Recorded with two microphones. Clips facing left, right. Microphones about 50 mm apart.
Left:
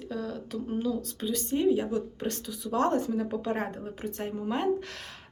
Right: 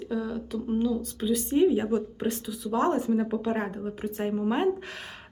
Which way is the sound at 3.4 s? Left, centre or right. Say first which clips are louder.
Right 2 dB; centre.